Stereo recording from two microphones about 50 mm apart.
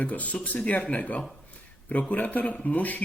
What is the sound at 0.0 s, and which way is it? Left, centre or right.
A man's voice, left.